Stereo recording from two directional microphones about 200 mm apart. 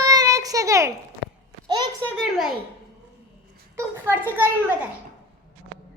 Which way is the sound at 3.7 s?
10° right (ahead or behind).